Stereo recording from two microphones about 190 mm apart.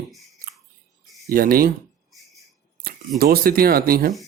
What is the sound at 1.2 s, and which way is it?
Speech, 50° right (ahead or behind).